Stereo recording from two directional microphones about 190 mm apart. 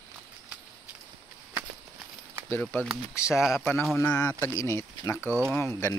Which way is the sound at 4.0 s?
15° left (ahead or behind).